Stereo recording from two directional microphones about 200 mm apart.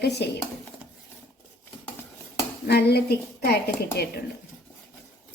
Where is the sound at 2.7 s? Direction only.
55° left (ahead or behind).